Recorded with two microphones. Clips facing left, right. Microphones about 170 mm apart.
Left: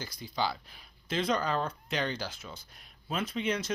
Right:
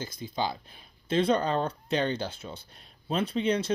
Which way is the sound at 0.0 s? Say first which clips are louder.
Right 2 dB; 25° right (ahead or behind).